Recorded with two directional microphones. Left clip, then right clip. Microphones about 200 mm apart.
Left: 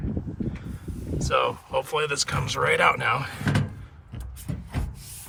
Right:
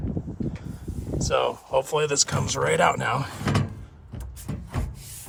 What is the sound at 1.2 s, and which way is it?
Speech, 15° right (ahead or behind).